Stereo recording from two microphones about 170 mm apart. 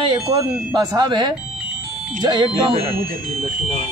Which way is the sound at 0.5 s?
5° right (ahead or behind).